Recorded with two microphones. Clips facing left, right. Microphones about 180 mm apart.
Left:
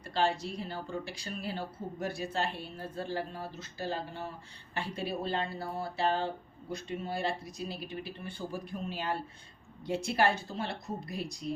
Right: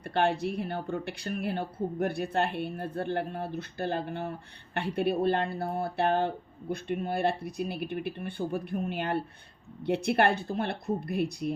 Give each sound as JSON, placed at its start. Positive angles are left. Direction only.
{"t": 0.0, "sound": "a woman's voice", "side_deg": -60}